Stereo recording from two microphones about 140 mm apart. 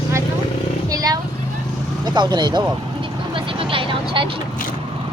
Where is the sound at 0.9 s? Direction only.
25° right (ahead or behind).